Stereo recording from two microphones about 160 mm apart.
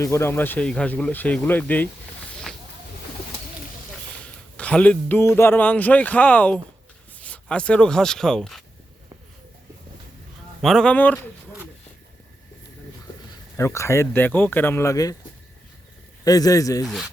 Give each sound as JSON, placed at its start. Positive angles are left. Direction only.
{"t": 0.0, "sound": "speech", "side_deg": 15}
{"t": 2.5, "sound": "a sound", "side_deg": 5}
{"t": 4.2, "sound": "a man's voice", "side_deg": 5}
{"t": 10.6, "sound": "speech", "side_deg": 0}
{"t": 13.3, "sound": "speech", "side_deg": 15}
{"t": 16.2, "sound": "speech", "side_deg": 20}
{"t": 16.8, "sound": "speech", "side_deg": 0}